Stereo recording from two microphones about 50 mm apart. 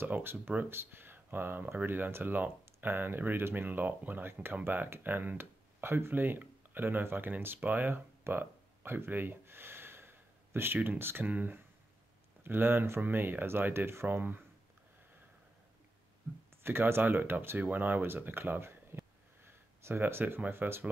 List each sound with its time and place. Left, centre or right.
0.0 s speech: right
8.2 s a sound: right
11.3 s speech: right
14.0 s speech: right
16.6 s speech: right